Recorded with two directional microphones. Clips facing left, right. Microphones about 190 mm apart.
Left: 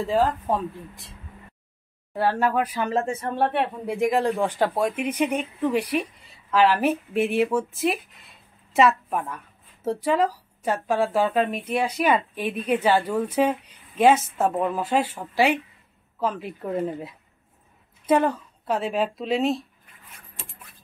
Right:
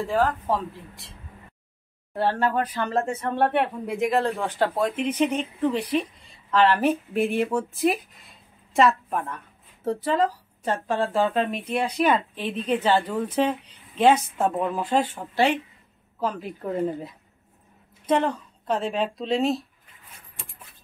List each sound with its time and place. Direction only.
0.0 s speech: 20° left (ahead or behind)
2.1 s a woman's voice: 10° left (ahead or behind)